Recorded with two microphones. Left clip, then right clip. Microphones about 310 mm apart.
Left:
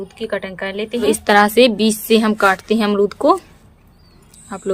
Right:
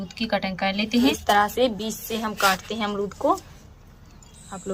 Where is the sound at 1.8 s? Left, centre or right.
Left.